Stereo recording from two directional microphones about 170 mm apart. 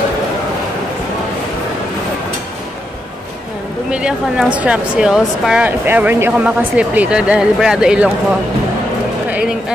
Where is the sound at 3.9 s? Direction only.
5° right (ahead or behind).